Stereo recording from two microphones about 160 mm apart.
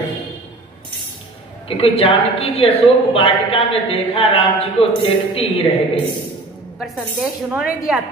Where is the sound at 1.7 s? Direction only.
35° left (ahead or behind).